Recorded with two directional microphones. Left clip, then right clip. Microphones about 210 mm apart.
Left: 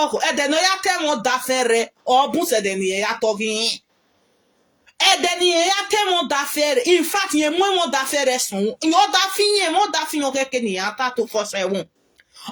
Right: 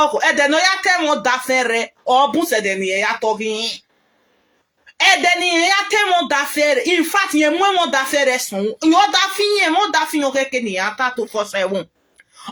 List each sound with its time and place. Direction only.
0.0 s speech: 35° left (ahead or behind)
4.9 s speech: 35° left (ahead or behind)